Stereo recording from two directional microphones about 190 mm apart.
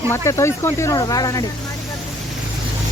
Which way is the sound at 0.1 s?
15° left (ahead or behind).